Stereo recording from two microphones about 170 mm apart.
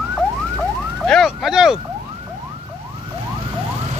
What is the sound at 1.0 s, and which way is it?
Vehicle, centre (ahead or behind).